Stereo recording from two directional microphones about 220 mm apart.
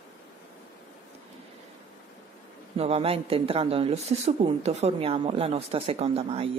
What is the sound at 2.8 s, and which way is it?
A woman's voice, 25° right (ahead or behind).